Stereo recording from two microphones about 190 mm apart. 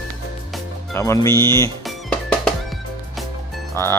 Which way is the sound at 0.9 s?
15° left (ahead or behind).